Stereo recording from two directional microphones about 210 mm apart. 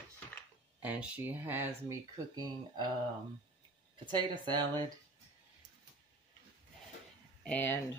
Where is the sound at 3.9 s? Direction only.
20° right (ahead or behind).